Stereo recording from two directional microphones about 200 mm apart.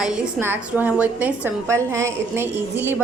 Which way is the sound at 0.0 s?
5° right (ahead or behind).